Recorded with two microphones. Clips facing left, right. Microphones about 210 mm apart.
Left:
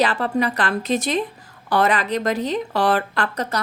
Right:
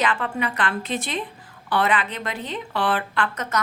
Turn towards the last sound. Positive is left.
turn(degrees=35)  # may be behind; listen again after turning